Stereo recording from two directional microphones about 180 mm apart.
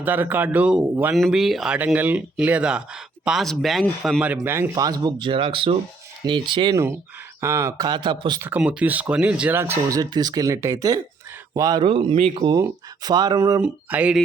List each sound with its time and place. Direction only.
0.0 s speech: 10° right (ahead or behind); by 6.7 s 30° right (ahead or behind)
7.4 s speech: 15° right (ahead or behind)
8.4 s speech: 10° right (ahead or behind)
11.8 s speech: 30° right (ahead or behind)
12.5 s speech: 20° right (ahead or behind)
13.6 s speech: 5° right (ahead or behind)